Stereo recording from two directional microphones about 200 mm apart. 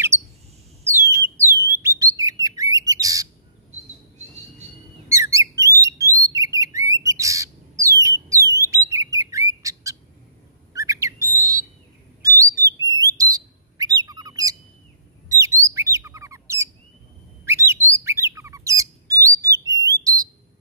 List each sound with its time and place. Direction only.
0.1 s bird: 10° right (ahead or behind)
5.0 s a sound: 15° right (ahead or behind)
8.6 s bird: 15° right (ahead or behind)
19.8 s whistle: 20° right (ahead or behind)